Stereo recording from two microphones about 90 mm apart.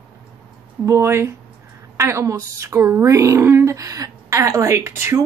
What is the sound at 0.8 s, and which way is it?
A woman's voice, 30° right (ahead or behind).